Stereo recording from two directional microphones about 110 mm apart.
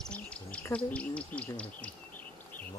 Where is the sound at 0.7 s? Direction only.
10° left (ahead or behind).